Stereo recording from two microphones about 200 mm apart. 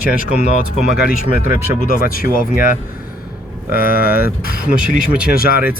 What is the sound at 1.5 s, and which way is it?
Speech, 10° right (ahead or behind).